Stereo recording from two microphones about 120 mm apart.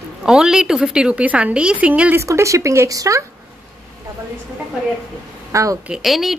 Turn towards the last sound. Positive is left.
turn(degrees=0)  # may be behind; listen again after turning